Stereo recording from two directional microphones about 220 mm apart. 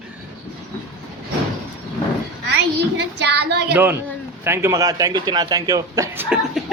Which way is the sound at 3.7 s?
10° right (ahead or behind).